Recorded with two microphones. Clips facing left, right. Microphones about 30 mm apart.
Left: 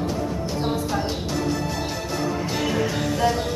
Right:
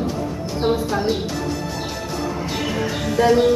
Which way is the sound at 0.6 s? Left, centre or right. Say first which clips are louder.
Right 7 dB; right.